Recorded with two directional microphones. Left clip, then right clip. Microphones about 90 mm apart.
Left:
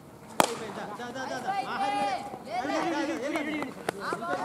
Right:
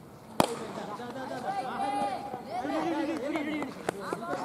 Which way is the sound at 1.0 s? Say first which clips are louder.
Left 4 dB; 40° left (ahead or behind).